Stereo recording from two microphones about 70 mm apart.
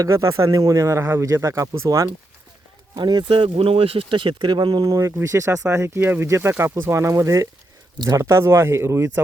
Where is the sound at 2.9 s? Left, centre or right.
Right.